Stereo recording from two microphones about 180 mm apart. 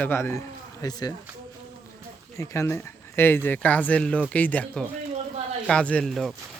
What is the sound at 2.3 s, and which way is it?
A child's voice, 15° left (ahead or behind).